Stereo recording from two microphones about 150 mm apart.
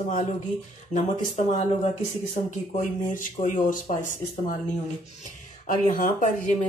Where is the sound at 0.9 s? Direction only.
45° left (ahead or behind).